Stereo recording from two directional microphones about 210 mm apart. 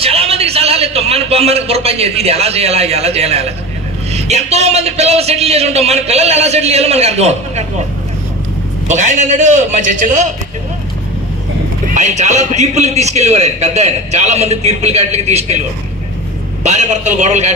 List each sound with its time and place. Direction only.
0.0 s a man's voice: 30° right (ahead or behind)
8.9 s a man's voice: 35° right (ahead or behind)
11.9 s a man's voice: 35° right (ahead or behind)
16.6 s a man's voice: 35° right (ahead or behind)